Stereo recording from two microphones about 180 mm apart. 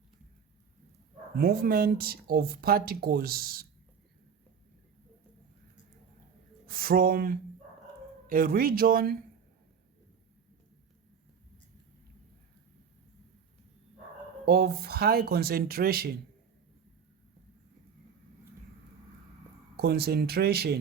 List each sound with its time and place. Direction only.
1.4 s speech: 55° right (ahead or behind)
6.7 s speech: 55° right (ahead or behind)
14.4 s speech: 60° right (ahead or behind)
19.7 s speech: 60° right (ahead or behind)